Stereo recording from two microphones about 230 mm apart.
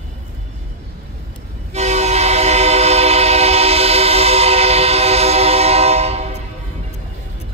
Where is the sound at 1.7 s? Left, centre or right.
Right.